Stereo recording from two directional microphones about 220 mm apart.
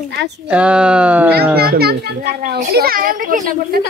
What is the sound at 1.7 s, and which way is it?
A child's voice, 45° right (ahead or behind).